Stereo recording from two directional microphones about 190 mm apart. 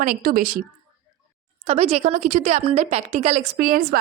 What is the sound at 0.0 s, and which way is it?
Speech, 45° right (ahead or behind).